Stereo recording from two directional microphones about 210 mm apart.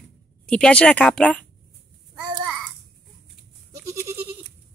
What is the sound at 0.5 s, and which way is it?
Speech, 5° left (ahead or behind).